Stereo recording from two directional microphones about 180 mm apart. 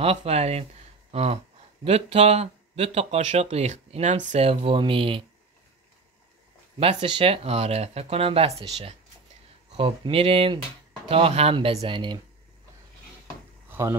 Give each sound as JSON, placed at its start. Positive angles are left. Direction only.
{"t": 0.0, "sound": "speech", "side_deg": -35}
{"t": 6.8, "sound": "speech", "side_deg": -30}
{"t": 13.7, "sound": "a sound", "side_deg": -15}